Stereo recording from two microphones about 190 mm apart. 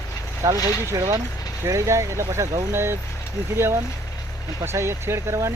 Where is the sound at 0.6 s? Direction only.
15° left (ahead or behind).